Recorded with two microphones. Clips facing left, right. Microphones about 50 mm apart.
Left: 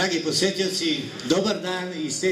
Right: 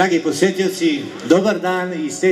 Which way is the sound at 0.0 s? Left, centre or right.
Right.